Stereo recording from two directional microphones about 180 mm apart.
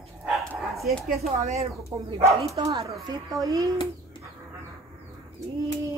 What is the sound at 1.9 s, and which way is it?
Speech, 25° right (ahead or behind).